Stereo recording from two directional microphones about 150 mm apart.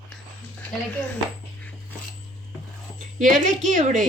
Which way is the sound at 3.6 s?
55° right (ahead or behind).